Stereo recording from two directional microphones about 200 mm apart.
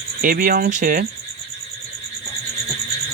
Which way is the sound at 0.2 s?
45° right (ahead or behind).